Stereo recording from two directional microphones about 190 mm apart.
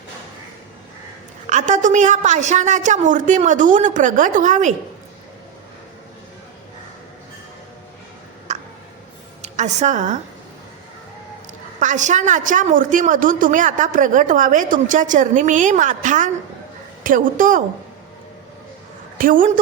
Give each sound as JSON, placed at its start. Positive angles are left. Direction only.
{"t": 1.5, "sound": "a woman's voice", "side_deg": -40}
{"t": 8.5, "sound": "a sound", "side_deg": -35}
{"t": 9.4, "sound": "a woman's voice", "side_deg": -35}
{"t": 11.8, "sound": "a woman's voice", "side_deg": -40}
{"t": 19.2, "sound": "a woman's voice", "side_deg": -45}